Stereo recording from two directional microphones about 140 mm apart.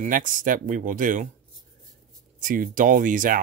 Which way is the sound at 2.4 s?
75° right (ahead or behind).